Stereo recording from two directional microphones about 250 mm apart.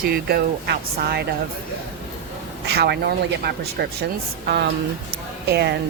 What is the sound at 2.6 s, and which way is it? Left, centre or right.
Speech, right.